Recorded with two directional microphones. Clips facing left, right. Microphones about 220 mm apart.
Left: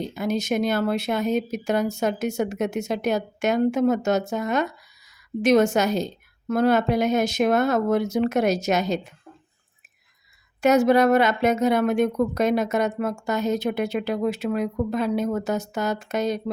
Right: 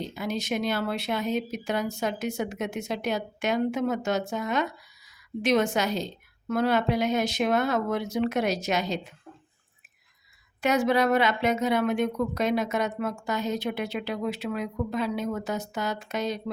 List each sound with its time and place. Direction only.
0.2 s speech: 45° left (ahead or behind)
10.6 s speech: 45° left (ahead or behind)